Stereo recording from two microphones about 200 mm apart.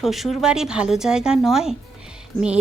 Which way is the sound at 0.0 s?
Centre (ahead or behind).